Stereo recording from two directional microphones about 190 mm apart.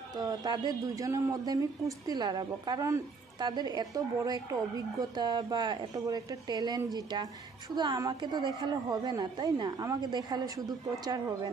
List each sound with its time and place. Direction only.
0.2 s speech: 20° right (ahead or behind)